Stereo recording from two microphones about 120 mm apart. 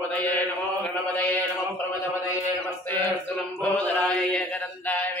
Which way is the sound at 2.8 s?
15° left (ahead or behind).